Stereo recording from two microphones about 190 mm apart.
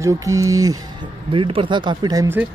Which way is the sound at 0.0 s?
15° right (ahead or behind).